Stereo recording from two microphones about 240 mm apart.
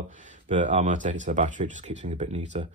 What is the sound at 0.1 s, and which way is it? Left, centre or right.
Speech, right.